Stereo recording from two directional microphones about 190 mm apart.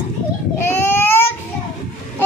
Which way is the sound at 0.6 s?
10° left (ahead or behind).